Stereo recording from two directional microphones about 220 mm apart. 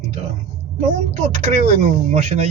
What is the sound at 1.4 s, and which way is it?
Speech, 30° right (ahead or behind).